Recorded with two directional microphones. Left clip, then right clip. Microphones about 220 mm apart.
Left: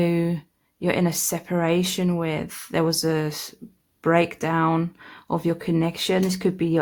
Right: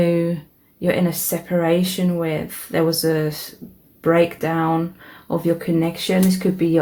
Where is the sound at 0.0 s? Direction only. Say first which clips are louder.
Right 5 dB; 35° left (ahead or behind).